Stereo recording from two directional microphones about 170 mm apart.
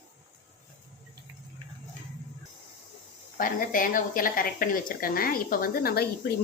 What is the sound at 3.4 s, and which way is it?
Speech, 55° left (ahead or behind).